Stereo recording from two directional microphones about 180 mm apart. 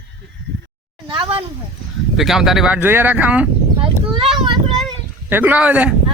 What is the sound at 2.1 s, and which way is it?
Speech, centre (ahead or behind).